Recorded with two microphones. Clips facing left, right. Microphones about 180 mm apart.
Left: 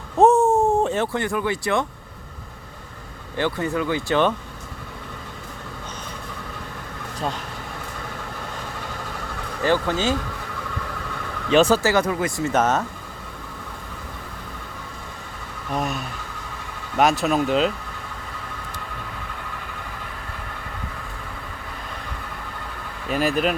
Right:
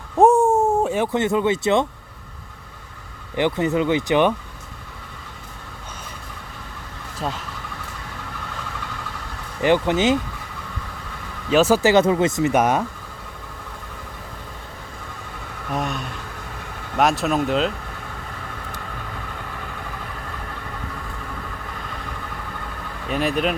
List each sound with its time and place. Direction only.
0.2 s speech: 10° right (ahead or behind)
3.3 s speech: 20° right (ahead or behind)
9.6 s speech: 20° right (ahead or behind)
11.5 s speech: 5° right (ahead or behind)
11.8 s speech: 20° right (ahead or behind)
15.7 s speech: centre (ahead or behind)
23.0 s speech: centre (ahead or behind)